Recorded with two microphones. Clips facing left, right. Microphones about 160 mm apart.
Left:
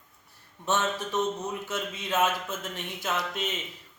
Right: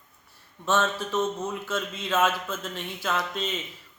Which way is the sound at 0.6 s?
15° left (ahead or behind).